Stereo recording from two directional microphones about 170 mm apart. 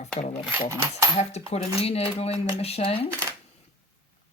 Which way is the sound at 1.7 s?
35° left (ahead or behind).